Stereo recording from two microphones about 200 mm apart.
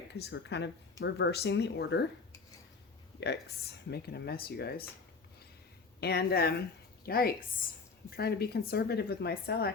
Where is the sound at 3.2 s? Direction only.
55° left (ahead or behind).